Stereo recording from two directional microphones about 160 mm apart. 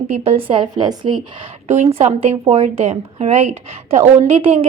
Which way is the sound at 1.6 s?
45° right (ahead or behind).